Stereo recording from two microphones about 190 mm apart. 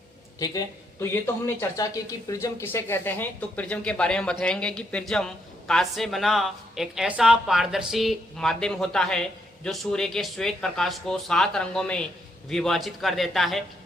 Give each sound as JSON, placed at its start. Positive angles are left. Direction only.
{"t": 0.3, "sound": "speech", "side_deg": 20}